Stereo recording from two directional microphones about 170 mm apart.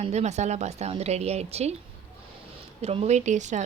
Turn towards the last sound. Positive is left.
turn(degrees=-45)  # may be behind; listen again after turning